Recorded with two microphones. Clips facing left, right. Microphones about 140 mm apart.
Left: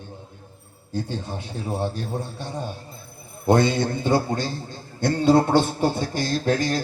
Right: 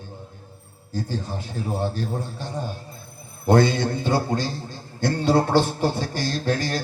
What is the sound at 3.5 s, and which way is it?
Speech, 20° left (ahead or behind).